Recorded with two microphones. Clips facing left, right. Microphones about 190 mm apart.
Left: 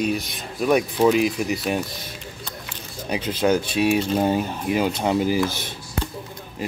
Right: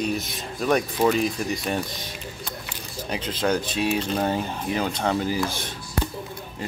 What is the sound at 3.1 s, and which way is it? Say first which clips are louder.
Speech: left 4 dB; 10° left (ahead or behind).